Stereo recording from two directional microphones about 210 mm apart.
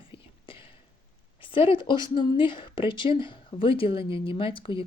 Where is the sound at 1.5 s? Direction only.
25° left (ahead or behind).